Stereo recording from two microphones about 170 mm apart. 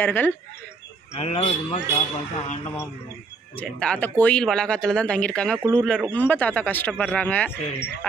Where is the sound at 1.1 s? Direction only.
35° left (ahead or behind).